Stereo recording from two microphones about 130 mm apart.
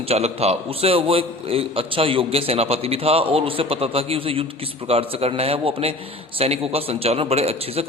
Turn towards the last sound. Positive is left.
turn(degrees=-50)  # may be behind; listen again after turning